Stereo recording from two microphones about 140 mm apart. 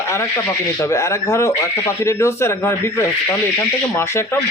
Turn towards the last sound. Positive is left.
turn(degrees=20)  # may be behind; listen again after turning